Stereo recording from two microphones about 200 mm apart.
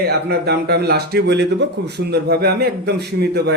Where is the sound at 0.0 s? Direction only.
50° right (ahead or behind).